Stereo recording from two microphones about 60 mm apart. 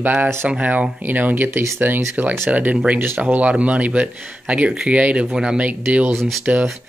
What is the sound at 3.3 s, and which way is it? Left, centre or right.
Speech, right.